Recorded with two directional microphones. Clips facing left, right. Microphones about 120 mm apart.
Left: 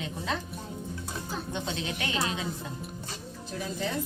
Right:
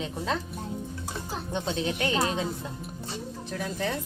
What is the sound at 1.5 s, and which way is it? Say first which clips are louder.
Speech: right 7 dB; 40° right (ahead or behind).